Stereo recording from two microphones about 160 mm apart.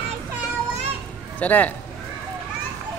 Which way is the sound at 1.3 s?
10° left (ahead or behind).